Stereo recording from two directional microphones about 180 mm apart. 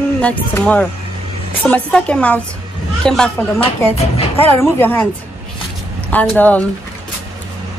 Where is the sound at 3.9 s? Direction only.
35° left (ahead or behind).